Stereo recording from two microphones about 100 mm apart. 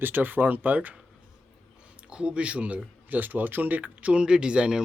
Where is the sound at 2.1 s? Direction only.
10° right (ahead or behind).